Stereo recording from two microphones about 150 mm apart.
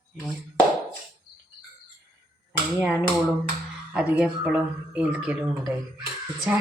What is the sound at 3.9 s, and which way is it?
Speech, 10° right (ahead or behind).